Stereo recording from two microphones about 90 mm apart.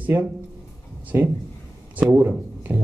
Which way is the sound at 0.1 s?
30° right (ahead or behind).